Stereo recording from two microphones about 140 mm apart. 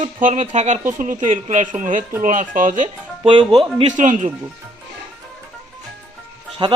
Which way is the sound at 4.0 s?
65° right (ahead or behind).